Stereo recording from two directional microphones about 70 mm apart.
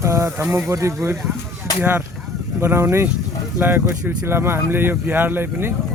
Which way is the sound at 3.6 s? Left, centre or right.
Right.